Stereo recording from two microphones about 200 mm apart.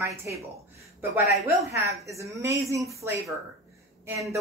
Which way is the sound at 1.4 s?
15° right (ahead or behind).